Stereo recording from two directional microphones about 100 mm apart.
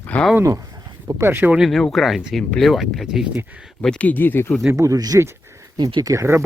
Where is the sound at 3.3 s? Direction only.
15° right (ahead or behind).